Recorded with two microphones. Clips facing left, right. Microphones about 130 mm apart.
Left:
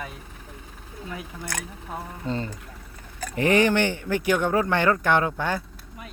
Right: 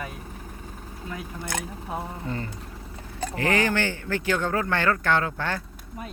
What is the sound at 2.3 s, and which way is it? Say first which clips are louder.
Speech: left 3 dB; 25° left (ahead or behind).